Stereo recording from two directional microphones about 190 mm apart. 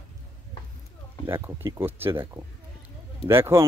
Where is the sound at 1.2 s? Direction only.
10° right (ahead or behind).